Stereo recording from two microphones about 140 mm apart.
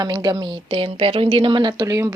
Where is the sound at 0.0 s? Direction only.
30° right (ahead or behind).